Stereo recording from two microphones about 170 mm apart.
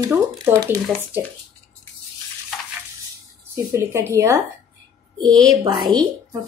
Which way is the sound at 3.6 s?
15° right (ahead or behind).